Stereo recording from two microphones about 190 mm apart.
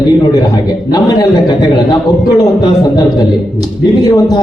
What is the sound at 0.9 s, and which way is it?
Speech, 20° left (ahead or behind).